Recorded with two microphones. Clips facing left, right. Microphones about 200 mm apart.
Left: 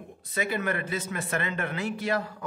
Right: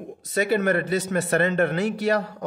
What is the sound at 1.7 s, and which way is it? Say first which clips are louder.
Speech: right 6 dB; 75° right (ahead or behind).